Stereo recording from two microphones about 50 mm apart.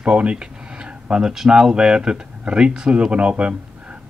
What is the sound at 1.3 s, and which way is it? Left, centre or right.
Speech, centre.